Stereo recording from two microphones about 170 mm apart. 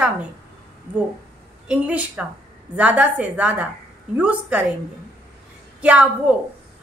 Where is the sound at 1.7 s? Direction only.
10° right (ahead or behind).